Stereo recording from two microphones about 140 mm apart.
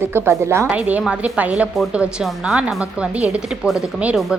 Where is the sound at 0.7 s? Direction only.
10° right (ahead or behind).